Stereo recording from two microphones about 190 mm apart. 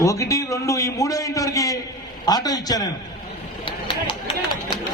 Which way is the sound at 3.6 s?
30° left (ahead or behind).